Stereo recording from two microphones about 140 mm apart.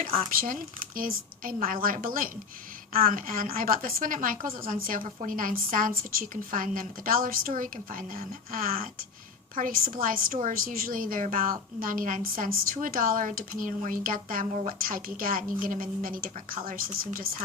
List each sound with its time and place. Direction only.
0.0 s a woman's voice: 80° right
9.6 s a woman's voice: 75° right (ahead or behind)